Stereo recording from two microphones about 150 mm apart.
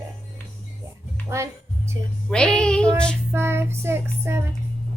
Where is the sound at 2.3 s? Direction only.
5° left (ahead or behind).